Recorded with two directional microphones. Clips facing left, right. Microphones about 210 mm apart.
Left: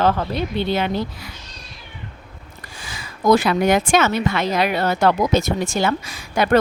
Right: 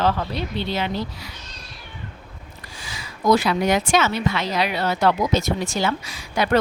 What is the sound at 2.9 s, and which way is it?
Speech, 50° left (ahead or behind).